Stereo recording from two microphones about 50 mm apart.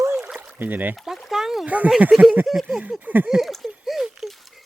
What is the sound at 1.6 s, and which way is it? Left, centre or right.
Speech, right.